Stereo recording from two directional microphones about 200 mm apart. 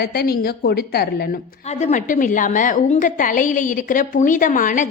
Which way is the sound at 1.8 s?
40° left (ahead or behind).